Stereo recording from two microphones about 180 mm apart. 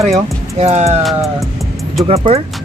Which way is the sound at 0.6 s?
35° right (ahead or behind).